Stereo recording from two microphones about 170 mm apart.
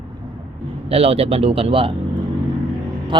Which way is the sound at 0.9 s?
35° right (ahead or behind).